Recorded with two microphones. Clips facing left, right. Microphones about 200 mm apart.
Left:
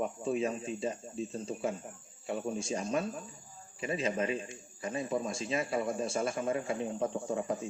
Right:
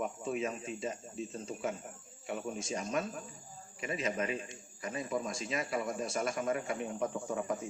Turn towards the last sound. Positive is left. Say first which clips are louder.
# left 2 dB
turn(degrees=30)  # may be behind; listen again after turning